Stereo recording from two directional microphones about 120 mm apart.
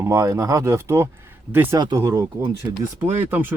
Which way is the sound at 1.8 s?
35° right (ahead or behind).